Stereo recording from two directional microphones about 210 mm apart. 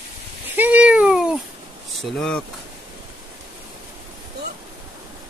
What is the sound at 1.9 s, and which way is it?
Speech, centre (ahead or behind).